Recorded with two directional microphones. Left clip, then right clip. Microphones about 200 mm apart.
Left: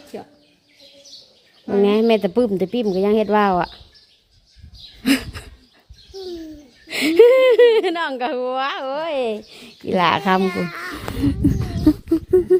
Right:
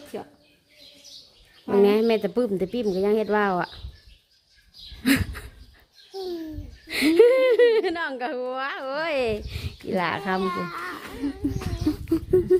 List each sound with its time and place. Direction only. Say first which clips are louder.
0.1 s speech: left 1 dB; centre (ahead or behind)
1.8 s speech: left 4 dB; 20° left (ahead or behind)
5.0 s a sound: left 3 dB; 15° left (ahead or behind)
6.8 s a woman's voice: left 5 dB; 20° left (ahead or behind)
9.8 s speech: left 9 dB; 30° left (ahead or behind)
10.4 s speech: left 4 dB; 5° left (ahead or behind)
11.9 s a sound: left 8 dB; 10° left (ahead or behind)
12.3 s patter: left 5 dB; 20° left (ahead or behind)